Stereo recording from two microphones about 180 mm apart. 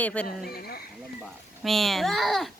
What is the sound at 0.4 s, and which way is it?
Speech, 55° left (ahead or behind).